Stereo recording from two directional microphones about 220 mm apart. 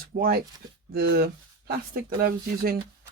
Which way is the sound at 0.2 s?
45° right (ahead or behind).